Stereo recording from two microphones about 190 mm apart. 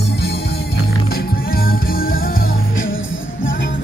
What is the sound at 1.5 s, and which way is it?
Music, 50° left (ahead or behind).